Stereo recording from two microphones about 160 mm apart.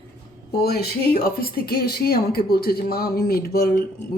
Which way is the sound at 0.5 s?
80° left.